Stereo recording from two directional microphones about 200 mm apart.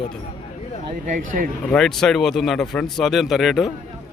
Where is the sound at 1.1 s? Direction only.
45° right (ahead or behind).